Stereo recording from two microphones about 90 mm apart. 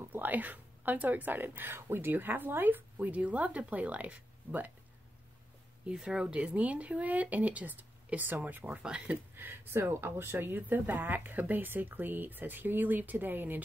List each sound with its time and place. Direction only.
0.0 s a woman's voice: 20° right (ahead or behind)
5.9 s speech: 10° right (ahead or behind)
9.3 s speech: 25° right (ahead or behind)